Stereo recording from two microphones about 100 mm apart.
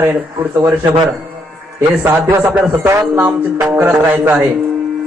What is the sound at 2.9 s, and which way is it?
A man's voice, 25° right (ahead or behind).